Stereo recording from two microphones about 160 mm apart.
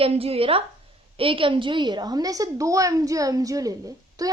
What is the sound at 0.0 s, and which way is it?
A woman's voice, 35° right (ahead or behind).